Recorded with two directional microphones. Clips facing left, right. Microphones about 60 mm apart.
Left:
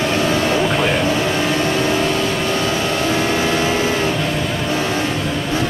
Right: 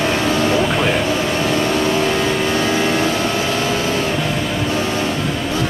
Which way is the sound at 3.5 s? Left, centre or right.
Left.